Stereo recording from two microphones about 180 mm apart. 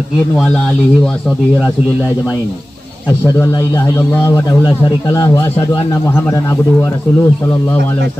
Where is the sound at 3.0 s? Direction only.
15° left (ahead or behind).